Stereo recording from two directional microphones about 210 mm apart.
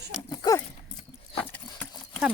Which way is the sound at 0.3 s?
15° left (ahead or behind).